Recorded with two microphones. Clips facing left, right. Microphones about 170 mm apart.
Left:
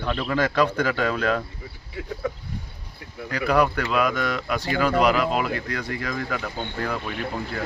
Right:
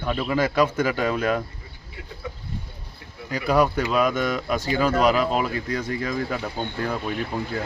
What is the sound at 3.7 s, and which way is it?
Speech, 20° right (ahead or behind).